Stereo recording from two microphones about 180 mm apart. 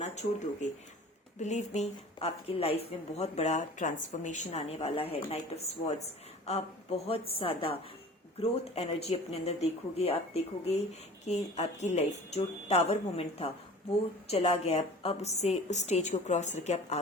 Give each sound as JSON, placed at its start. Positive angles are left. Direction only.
{"t": 0.0, "sound": "a woman's voice", "side_deg": 40}